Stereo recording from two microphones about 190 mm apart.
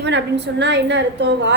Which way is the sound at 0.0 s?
65° right (ahead or behind).